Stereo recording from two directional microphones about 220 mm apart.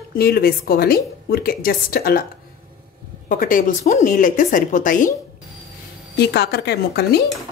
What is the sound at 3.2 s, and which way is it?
A woman's voice, 40° left (ahead or behind).